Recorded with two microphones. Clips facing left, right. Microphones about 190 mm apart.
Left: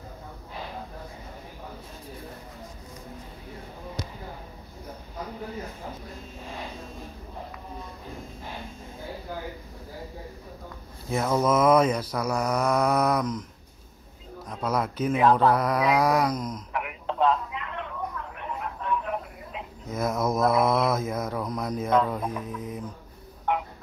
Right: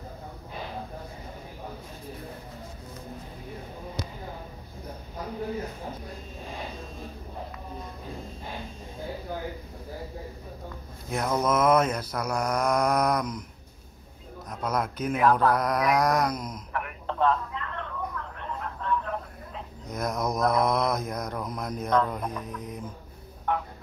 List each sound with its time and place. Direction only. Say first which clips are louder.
11.1 s mantra: left 2 dB; 5° left (ahead or behind)
12.0 s mantra: left 2 dB; 5° left (ahead or behind)
14.5 s speech: left 2 dB; 5° left (ahead or behind)
15.5 s mantra: left 1 dB; 5° left (ahead or behind)
16.7 s telephone: even; 15° left (ahead or behind)
19.9 s mantra: left 3 dB; 5° left (ahead or behind)
23.5 s fowl: left 1 dB; 15° left (ahead or behind)